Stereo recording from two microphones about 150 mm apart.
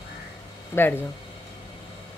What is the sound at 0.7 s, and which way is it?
Speech, 20° left (ahead or behind).